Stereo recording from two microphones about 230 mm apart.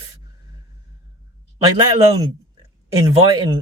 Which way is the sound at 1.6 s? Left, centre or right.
Centre.